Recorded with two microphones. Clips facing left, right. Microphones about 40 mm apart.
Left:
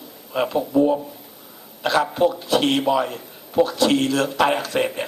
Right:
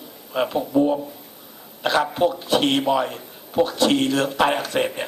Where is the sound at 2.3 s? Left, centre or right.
Right.